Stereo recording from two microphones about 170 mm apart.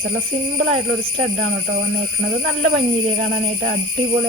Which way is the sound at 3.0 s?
50° right (ahead or behind).